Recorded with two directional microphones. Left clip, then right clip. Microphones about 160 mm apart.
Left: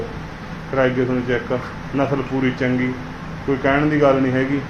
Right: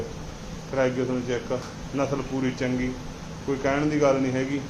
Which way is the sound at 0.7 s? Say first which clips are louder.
Left 6 dB; 20° right (ahead or behind).